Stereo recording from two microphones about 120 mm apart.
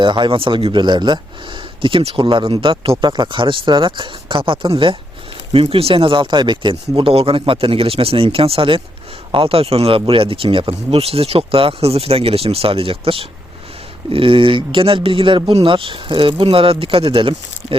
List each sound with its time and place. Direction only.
0.0 s speech: 40° right (ahead or behind)